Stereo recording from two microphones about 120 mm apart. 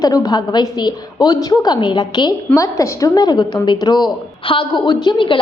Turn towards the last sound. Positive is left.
turn(degrees=40)  # may be behind; listen again after turning